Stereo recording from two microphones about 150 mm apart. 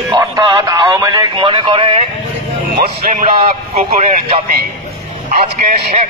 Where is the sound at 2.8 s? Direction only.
90° right.